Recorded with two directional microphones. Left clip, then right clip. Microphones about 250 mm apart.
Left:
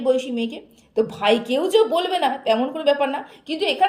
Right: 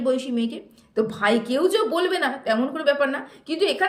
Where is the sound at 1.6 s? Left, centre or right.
Right.